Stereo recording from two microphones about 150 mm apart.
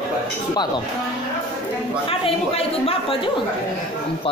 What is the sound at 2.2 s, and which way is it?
Speech, 40° left (ahead or behind).